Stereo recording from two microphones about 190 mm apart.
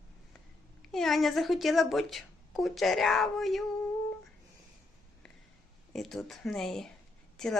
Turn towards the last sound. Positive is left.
turn(degrees=5)  # may be behind; listen again after turning